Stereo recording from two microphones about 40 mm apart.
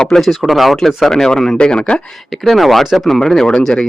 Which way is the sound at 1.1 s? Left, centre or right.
Centre.